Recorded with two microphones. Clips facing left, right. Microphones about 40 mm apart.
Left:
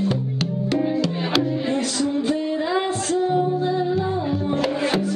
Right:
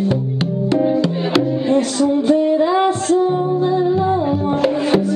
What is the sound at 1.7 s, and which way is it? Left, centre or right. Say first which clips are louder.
Music: right 7 dB; right.